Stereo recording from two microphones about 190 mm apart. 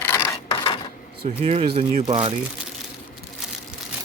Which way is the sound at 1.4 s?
30° right (ahead or behind).